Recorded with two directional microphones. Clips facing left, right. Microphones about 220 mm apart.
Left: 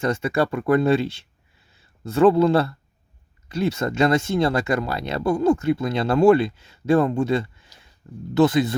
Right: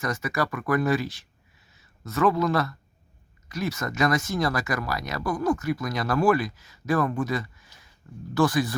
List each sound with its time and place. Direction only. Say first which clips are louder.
0.0 s speech: left 6 dB; 30° left (ahead or behind)